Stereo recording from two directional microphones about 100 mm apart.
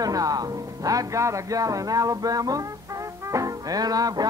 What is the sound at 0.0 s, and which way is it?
Music, 35° right (ahead or behind).